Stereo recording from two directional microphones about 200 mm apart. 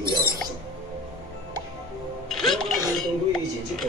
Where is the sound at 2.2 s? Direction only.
Centre (ahead or behind).